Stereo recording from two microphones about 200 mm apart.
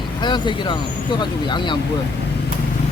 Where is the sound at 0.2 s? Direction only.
20° left (ahead or behind).